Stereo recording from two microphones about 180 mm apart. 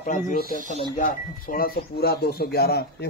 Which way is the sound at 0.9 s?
50° left (ahead or behind).